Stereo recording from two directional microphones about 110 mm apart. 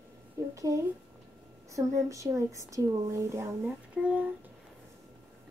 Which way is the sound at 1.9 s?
30° right (ahead or behind).